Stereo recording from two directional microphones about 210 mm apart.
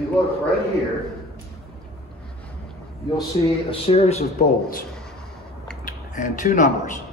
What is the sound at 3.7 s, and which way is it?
Speech, 30° left (ahead or behind).